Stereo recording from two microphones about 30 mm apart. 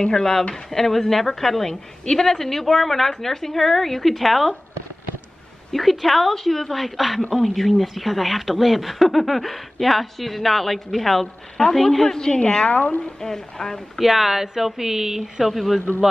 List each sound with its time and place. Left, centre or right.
0.0 s a woman's voice: centre
5.7 s speech: centre
7.2 s a woman's voice: centre
7.4 s speech: centre
12.2 s speech: left
12.6 s speech: left
13.2 s a woman's voice: centre
13.9 s speech: centre